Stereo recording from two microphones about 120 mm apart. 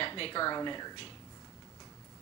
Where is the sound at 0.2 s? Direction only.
40° left (ahead or behind).